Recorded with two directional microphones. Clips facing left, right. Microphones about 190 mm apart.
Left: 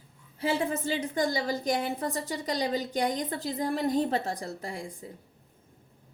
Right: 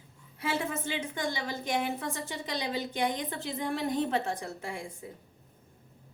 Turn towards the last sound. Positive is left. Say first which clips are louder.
# left 1 dB
turn(degrees=35)  # may be behind; listen again after turning